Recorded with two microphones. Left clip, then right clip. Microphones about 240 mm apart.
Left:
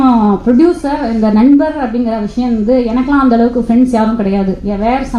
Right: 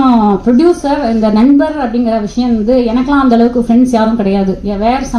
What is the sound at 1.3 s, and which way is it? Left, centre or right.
A woman's voice, right.